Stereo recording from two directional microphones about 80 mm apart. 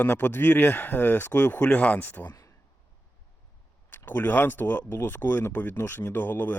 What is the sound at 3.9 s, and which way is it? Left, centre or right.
Speech, left.